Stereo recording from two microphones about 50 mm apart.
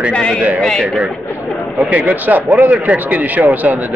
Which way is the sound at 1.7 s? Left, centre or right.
Right.